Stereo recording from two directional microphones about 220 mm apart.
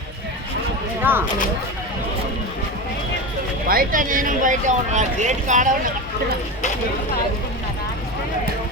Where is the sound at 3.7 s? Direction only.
40° right (ahead or behind).